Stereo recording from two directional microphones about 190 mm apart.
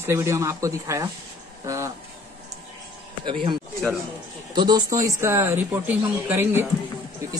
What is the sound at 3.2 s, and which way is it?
Speech, 25° right (ahead or behind).